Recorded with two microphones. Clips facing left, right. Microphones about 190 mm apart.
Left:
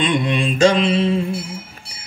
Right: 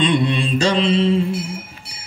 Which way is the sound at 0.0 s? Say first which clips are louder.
Right 1 dB; 35° right (ahead or behind).